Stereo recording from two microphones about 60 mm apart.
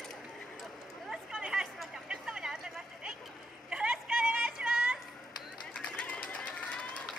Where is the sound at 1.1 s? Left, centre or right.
Centre.